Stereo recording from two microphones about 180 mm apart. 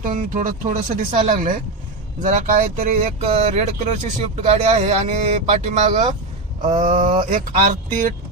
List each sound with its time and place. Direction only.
0.0 s speech: 45° right (ahead or behind)